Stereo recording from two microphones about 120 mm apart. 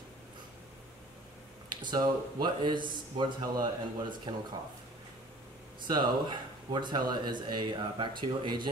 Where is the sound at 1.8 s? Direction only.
35° right (ahead or behind).